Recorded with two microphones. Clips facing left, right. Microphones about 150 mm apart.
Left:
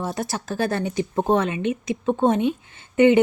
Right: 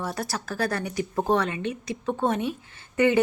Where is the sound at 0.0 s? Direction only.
20° left (ahead or behind).